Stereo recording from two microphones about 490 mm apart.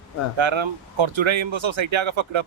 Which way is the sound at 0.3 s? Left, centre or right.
Right.